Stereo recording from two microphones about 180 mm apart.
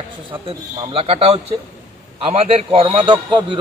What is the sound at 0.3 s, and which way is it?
A man's voice, 30° right (ahead or behind).